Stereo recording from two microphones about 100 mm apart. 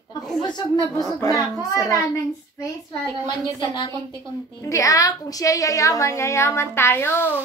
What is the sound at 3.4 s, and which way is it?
Speech, 45° left (ahead or behind).